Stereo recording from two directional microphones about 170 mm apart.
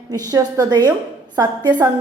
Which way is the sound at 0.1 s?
20° right (ahead or behind).